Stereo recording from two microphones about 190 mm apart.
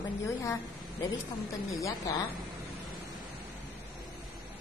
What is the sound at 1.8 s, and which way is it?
Speech, 15° left (ahead or behind).